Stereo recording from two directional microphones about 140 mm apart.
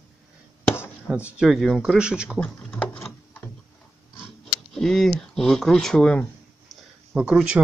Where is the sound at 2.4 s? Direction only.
10° left (ahead or behind).